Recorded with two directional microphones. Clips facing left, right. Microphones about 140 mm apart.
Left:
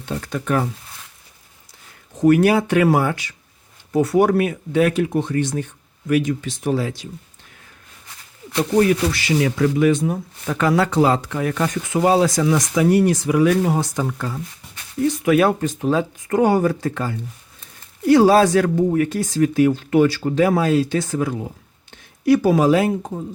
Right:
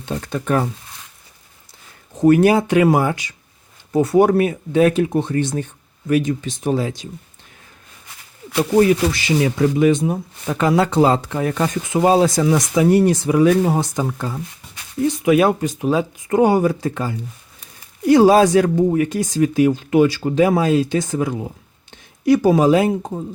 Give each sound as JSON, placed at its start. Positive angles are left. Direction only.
{"t": 0.0, "sound": "speech", "side_deg": -20}
{"t": 2.2, "sound": "speech", "side_deg": -25}
{"t": 8.8, "sound": "speech", "side_deg": -20}